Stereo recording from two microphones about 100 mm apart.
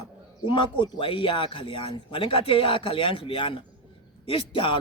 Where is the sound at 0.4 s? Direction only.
55° left (ahead or behind).